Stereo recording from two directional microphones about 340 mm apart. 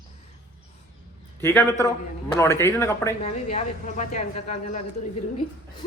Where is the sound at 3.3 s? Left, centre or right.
Centre.